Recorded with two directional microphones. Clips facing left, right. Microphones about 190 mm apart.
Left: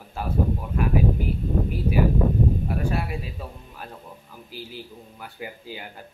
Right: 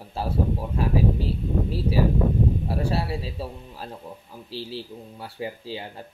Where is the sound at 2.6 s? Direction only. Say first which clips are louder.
Right 1 dB; 30° right (ahead or behind).